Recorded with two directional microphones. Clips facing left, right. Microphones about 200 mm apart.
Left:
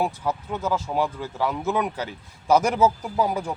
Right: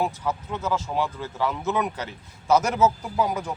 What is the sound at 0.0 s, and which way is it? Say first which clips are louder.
Speech: left 1 dB; 10° left (ahead or behind).